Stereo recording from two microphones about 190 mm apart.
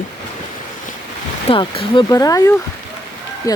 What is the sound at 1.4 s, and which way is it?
Speech, 25° left (ahead or behind).